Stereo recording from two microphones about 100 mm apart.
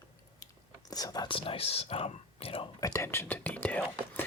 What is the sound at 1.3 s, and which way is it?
Speech, 65° left (ahead or behind).